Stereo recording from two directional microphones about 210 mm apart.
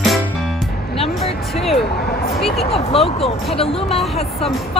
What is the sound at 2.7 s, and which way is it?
Speech, 30° left (ahead or behind).